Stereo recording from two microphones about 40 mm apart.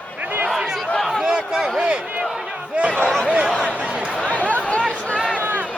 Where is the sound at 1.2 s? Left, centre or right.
Centre.